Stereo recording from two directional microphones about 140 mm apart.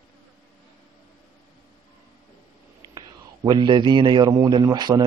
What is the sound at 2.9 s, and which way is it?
A man's voice, 30° right (ahead or behind).